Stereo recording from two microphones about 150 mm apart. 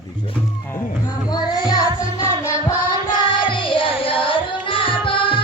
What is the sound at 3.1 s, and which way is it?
Music, 30° left (ahead or behind).